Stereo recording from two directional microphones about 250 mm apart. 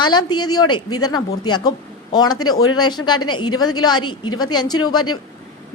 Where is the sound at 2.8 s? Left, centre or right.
Centre.